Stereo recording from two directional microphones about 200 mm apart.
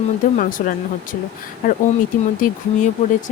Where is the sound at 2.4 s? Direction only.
40° left (ahead or behind).